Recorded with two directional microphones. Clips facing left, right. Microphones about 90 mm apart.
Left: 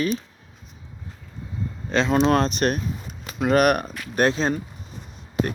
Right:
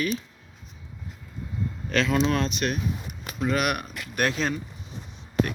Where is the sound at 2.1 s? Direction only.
40° left (ahead or behind).